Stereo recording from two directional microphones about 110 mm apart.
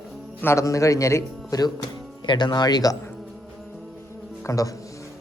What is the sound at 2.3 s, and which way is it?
Speech, 40° left (ahead or behind).